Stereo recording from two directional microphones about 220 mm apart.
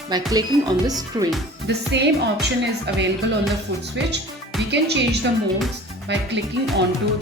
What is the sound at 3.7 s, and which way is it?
Speech, 55° right (ahead or behind).